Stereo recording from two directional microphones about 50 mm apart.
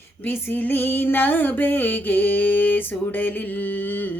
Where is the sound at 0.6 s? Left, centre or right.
Left.